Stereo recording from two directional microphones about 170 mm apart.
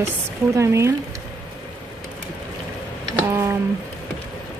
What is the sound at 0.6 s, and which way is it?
Speech, 15° right (ahead or behind).